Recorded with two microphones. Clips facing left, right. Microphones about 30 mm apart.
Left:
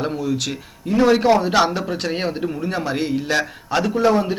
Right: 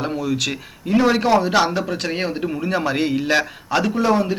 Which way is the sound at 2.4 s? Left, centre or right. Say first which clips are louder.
Right 2 dB; centre.